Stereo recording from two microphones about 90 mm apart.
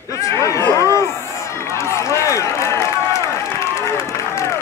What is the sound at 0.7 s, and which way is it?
Run, 35° left (ahead or behind).